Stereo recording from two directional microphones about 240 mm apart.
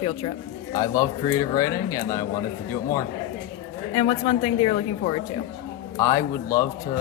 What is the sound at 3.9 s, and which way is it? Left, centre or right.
Speech, left.